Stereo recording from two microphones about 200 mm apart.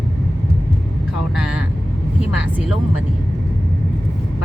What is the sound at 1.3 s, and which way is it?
Speech, 5° right (ahead or behind).